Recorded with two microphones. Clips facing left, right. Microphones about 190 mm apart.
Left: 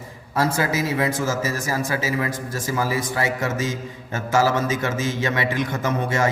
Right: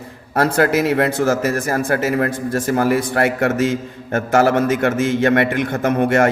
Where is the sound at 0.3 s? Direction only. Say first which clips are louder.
Right 6 dB; 60° right (ahead or behind).